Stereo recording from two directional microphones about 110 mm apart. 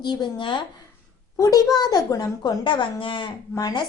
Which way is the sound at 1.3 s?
30° left (ahead or behind).